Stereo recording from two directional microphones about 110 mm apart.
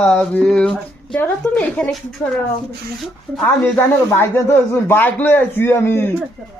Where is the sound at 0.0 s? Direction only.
10° left (ahead or behind).